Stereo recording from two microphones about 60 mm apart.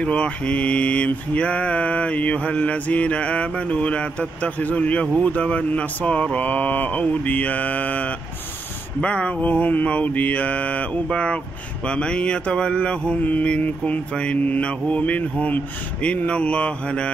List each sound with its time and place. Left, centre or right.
0.0 s mantra: centre